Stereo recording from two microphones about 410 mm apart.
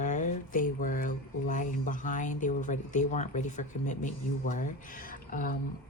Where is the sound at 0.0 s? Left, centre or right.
Centre.